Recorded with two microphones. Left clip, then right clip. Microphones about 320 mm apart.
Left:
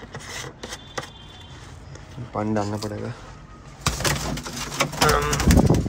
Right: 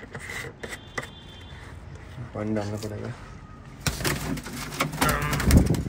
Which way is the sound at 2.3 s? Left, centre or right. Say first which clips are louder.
Left 5 dB; centre.